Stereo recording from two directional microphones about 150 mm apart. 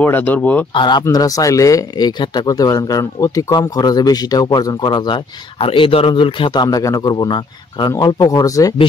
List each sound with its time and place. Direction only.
0.0 s speech: 10° left (ahead or behind)
0.7 s speech: 30° left (ahead or behind)